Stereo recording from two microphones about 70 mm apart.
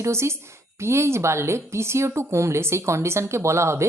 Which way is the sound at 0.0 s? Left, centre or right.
Right.